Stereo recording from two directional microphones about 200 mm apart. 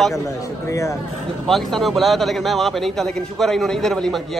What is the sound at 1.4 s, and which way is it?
A man's voice, centre (ahead or behind).